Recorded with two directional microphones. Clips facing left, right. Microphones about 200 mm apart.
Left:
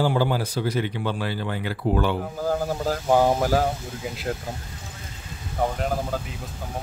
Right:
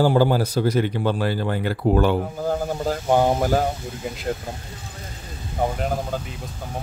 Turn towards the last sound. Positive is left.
turn(degrees=-5)  # may be behind; listen again after turning